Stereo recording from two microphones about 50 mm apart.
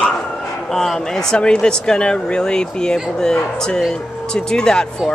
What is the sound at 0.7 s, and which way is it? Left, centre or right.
Speech, centre.